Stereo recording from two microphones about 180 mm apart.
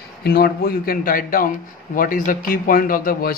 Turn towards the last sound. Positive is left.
turn(degrees=50)  # may be behind; listen again after turning